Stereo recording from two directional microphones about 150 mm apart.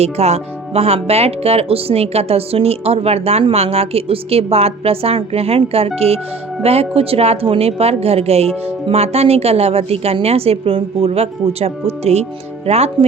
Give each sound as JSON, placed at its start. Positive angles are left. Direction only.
{"t": 0.0, "sound": "a woman's voice", "side_deg": -45}